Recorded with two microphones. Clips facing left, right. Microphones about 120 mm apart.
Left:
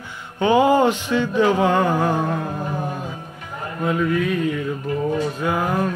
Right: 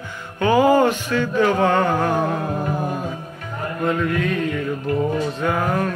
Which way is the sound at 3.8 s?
10° left (ahead or behind).